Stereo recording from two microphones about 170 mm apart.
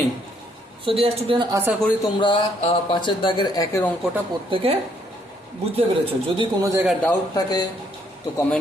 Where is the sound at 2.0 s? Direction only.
25° left (ahead or behind).